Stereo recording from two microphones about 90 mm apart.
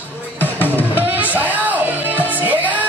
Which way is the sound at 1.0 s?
20° right (ahead or behind).